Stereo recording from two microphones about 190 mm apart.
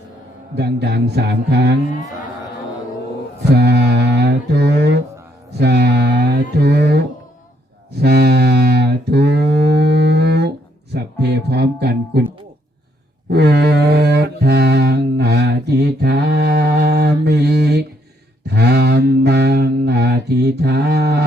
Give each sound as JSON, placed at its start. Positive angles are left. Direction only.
{"t": 0.5, "sound": "speech", "side_deg": -60}
{"t": 3.5, "sound": "mantra", "side_deg": -60}
{"t": 8.0, "sound": "a sound", "side_deg": -60}
{"t": 10.9, "sound": "music", "side_deg": -60}
{"t": 13.3, "sound": "mantra", "side_deg": -60}
{"t": 18.4, "sound": "a sound", "side_deg": -60}